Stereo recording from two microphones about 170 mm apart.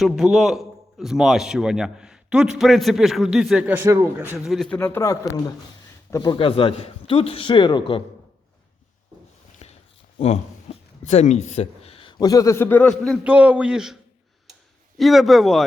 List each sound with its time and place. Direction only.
0.0 s a man's voice: centre (ahead or behind)
4.4 s a man's voice: centre (ahead or behind)
4.8 s a man's voice: 15° left (ahead or behind)
6.3 s a man's voice: 30° left (ahead or behind)
9.6 s a sound: 40° left (ahead or behind)
10.2 s speech: 40° left (ahead or behind); by 13.1 s 5° left (ahead or behind)
13.2 s a man's voice: 10° right (ahead or behind)